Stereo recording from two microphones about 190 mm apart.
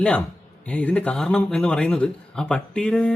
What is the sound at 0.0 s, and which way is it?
A man's voice, 5° left (ahead or behind).